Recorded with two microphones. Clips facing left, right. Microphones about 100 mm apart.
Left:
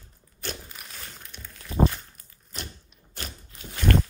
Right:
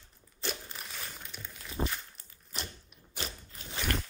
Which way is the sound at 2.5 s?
Centre (ahead or behind).